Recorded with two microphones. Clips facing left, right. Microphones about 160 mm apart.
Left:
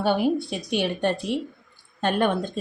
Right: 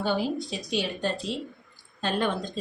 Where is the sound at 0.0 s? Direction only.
60° left (ahead or behind).